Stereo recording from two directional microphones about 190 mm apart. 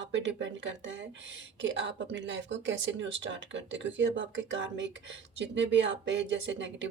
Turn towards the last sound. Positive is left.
turn(degrees=-75)  # may be behind; listen again after turning